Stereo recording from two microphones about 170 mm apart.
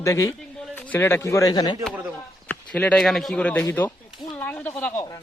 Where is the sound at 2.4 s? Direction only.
10° left (ahead or behind).